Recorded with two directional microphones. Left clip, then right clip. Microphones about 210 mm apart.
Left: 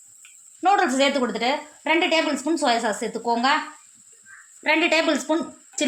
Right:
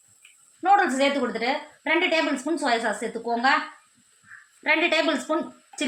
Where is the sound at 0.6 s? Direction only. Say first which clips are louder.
Left 1 dB; 45° left (ahead or behind).